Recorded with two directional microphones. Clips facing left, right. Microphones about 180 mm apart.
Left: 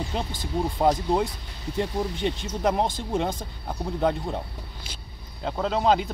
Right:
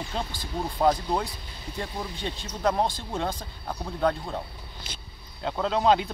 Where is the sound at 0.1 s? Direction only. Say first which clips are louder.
Left 3 dB; 15° left (ahead or behind).